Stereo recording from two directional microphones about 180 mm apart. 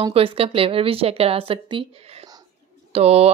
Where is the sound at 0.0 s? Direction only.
30° right (ahead or behind).